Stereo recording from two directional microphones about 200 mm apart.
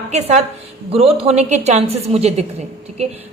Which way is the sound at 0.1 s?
35° right (ahead or behind).